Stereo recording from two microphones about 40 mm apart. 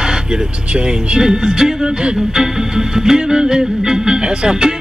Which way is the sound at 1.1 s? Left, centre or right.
Centre.